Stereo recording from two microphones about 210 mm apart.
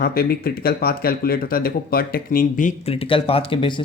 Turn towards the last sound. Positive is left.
turn(degrees=25)  # may be behind; listen again after turning